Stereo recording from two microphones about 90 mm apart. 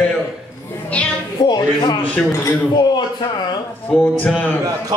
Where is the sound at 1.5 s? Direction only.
50° left (ahead or behind).